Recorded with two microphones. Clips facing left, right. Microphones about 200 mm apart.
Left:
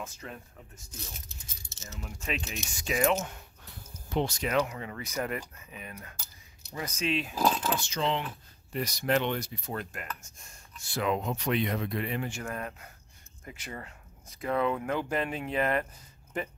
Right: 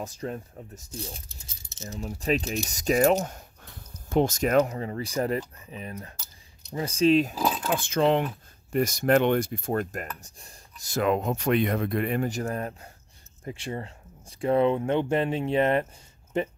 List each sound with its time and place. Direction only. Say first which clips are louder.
0.0 s speech: right 8 dB; 35° right (ahead or behind)
7.8 s speech: right 8 dB; 55° right (ahead or behind)
10.2 s speech: right 4 dB; 35° right (ahead or behind)